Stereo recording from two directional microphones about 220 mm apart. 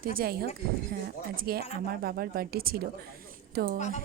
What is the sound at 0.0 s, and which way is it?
A woman's voice, 45° right (ahead or behind).